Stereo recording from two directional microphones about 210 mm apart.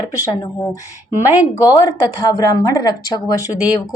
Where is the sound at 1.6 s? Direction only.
20° left (ahead or behind).